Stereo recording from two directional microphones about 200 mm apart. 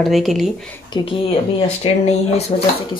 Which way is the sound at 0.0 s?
Centre (ahead or behind).